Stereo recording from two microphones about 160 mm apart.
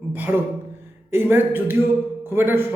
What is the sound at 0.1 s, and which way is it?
Speech, 10° right (ahead or behind).